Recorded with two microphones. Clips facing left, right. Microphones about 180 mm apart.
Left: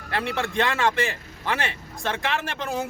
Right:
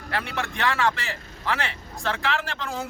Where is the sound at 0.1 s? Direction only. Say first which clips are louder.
Left 3 dB; 25° left (ahead or behind).